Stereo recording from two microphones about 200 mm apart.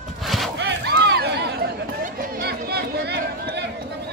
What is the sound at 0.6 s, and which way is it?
Chatter, 60° right (ahead or behind).